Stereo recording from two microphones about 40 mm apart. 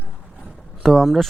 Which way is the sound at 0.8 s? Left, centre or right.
Centre.